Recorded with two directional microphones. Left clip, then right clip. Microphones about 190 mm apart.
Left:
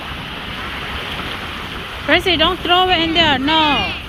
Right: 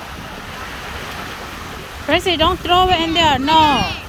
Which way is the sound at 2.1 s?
15° right (ahead or behind).